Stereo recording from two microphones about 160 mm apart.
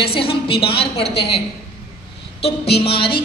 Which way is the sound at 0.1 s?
35° left (ahead or behind).